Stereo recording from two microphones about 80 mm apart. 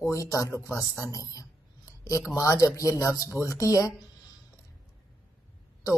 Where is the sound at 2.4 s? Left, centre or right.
Left.